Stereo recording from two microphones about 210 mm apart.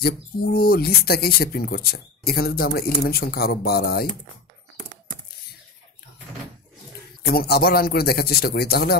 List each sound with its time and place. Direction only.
0.0 s speech: 45° left (ahead or behind)
7.2 s speech: 50° left (ahead or behind)